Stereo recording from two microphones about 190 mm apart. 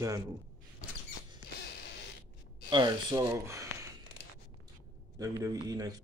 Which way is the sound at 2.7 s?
25° right (ahead or behind).